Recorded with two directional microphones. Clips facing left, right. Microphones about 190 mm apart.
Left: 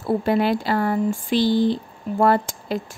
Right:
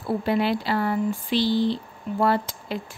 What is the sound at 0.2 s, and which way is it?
Speech, 45° left (ahead or behind).